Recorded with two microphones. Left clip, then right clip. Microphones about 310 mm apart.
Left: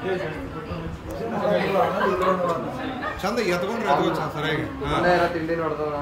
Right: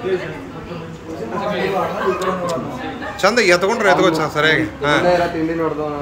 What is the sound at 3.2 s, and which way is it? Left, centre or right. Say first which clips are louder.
A man's voice: right 12 dB; centre.